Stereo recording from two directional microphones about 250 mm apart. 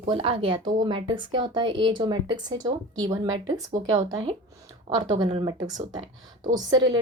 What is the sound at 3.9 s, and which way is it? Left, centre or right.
A woman's voice, right.